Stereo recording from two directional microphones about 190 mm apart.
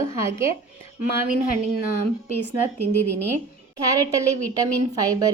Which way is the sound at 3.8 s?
15° right (ahead or behind).